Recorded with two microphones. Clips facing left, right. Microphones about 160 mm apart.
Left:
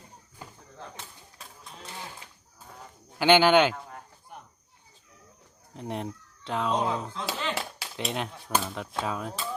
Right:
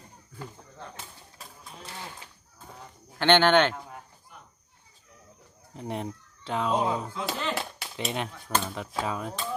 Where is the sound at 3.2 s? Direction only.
5° left (ahead or behind).